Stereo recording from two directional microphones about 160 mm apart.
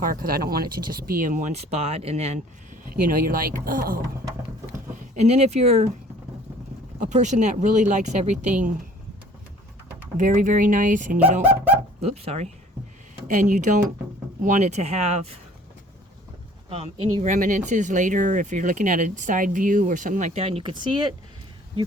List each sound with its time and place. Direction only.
0.0 s speech: 65° right (ahead or behind); by 2.4 s 45° right (ahead or behind)
2.9 s speech: 65° right (ahead or behind)
4.9 s speech: 45° right (ahead or behind)
7.0 s speech: 50° right (ahead or behind)
10.2 s speech: 55° right (ahead or behind)
12.0 s speech: 40° right (ahead or behind)
13.2 s speech: 55° right (ahead or behind)
16.6 s speech: 40° right (ahead or behind)
17.3 s speech: 50° right (ahead or behind); by 21.2 s 30° right (ahead or behind)